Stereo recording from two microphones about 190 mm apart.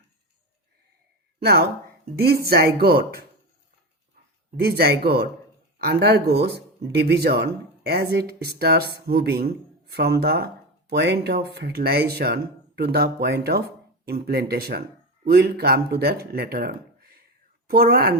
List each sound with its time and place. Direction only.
1.4 s a woman's voice: 55° right (ahead or behind)
4.6 s a woman's voice: 55° right (ahead or behind)